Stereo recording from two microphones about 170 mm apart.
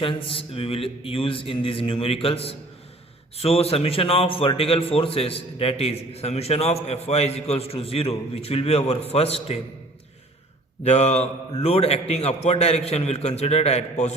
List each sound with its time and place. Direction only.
0.0 s a man's voice: 30° left (ahead or behind)
10.8 s a man's voice: 40° left (ahead or behind)